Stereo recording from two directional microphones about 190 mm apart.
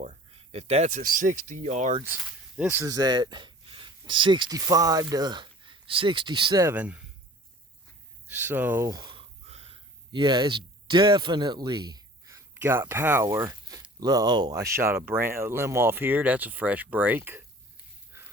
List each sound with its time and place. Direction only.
0.0 s speech: 35° right (ahead or behind)
2.0 s speech: 5° right (ahead or behind)
8.3 s speech: 10° right (ahead or behind)